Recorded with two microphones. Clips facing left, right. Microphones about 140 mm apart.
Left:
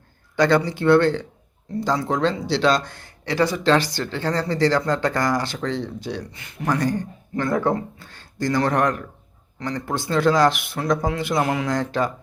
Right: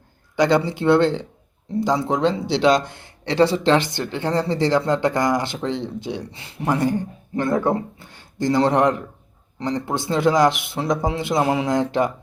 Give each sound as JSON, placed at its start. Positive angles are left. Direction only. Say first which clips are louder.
{"t": 0.3, "sound": "speech", "louder": "right 1 dB", "side_deg": -20}